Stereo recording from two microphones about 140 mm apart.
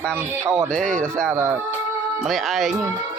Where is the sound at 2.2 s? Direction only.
Centre (ahead or behind).